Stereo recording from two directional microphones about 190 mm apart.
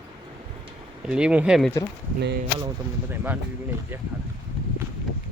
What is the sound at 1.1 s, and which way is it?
Speech, 5° right (ahead or behind).